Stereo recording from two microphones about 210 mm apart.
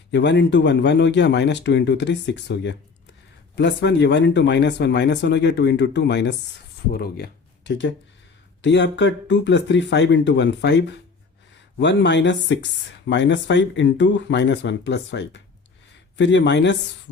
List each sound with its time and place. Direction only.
0.1 s speech: 55° left (ahead or behind)
7.7 s speech: 60° left (ahead or behind)